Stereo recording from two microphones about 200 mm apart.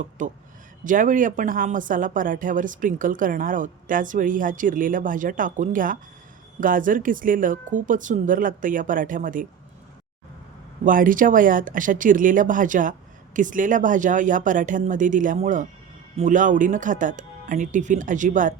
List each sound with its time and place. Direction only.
0.2 s speech: 40° right (ahead or behind)
10.8 s speech: 45° right (ahead or behind)